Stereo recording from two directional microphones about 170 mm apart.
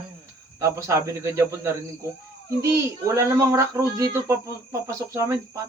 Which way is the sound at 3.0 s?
15° right (ahead or behind).